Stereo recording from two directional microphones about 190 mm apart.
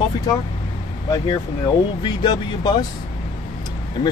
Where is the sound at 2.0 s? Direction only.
20° left (ahead or behind).